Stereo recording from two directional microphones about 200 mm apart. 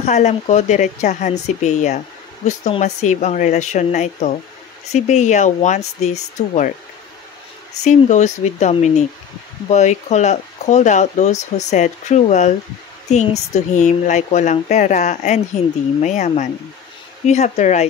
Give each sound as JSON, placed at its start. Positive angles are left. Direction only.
{"t": 0.0, "sound": "speech", "side_deg": 35}
{"t": 7.8, "sound": "speech", "side_deg": 35}